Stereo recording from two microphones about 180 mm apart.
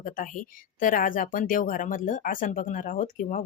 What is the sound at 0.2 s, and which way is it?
Speech, 45° left (ahead or behind).